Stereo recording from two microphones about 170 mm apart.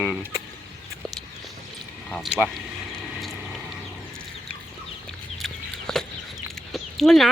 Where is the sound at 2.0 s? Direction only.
Centre (ahead or behind).